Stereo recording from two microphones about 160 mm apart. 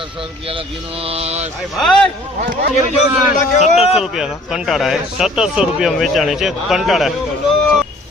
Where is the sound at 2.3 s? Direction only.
55° right (ahead or behind).